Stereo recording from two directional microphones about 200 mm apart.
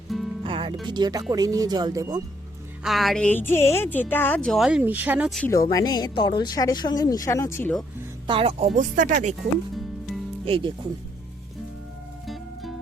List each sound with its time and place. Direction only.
0.1 s music: centre (ahead or behind)
0.4 s music: 25° right (ahead or behind)
0.9 s speech: 20° right (ahead or behind)
2.8 s a woman's voice: centre (ahead or behind)
5.4 s speech: 15° left (ahead or behind)
8.3 s speech: 30° right (ahead or behind)
10.4 s speech: 25° right (ahead or behind)
12.2 s music: centre (ahead or behind)